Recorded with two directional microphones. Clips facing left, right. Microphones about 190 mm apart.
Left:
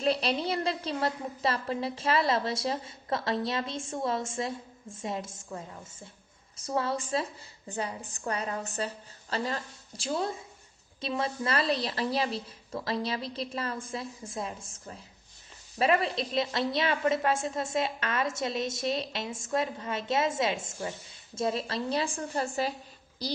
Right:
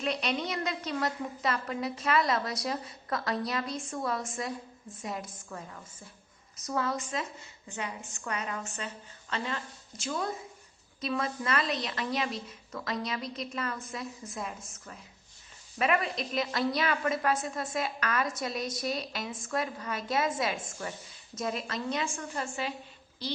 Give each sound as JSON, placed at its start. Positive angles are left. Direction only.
{"t": 0.0, "sound": "a woman's voice", "side_deg": 30}